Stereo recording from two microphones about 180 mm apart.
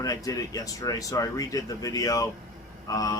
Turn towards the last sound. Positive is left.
turn(degrees=20)  # may be behind; listen again after turning